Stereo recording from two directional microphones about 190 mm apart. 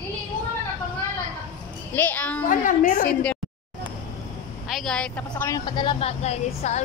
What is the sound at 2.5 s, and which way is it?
Speech, 45° left (ahead or behind).